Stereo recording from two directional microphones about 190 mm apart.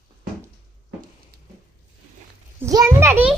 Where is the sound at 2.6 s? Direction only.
15° right (ahead or behind).